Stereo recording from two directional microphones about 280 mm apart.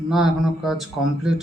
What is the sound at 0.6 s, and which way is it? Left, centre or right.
Speech, centre.